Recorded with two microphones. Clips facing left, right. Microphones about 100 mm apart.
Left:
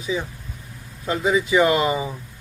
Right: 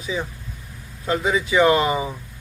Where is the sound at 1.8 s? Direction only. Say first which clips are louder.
Even; 25° right (ahead or behind).